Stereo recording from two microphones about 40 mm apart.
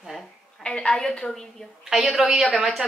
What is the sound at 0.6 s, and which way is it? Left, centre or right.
Speech, left.